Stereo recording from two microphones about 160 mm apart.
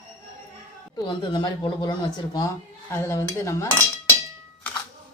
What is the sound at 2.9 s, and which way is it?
Cutlery, 15° left (ahead or behind).